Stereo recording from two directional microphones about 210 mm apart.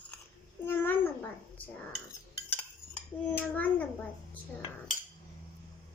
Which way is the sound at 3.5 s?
5° left (ahead or behind).